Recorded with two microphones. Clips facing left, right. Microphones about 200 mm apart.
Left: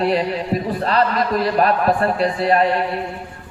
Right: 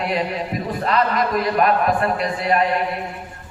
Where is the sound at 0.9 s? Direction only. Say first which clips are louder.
Left 1 dB; 35° left (ahead or behind).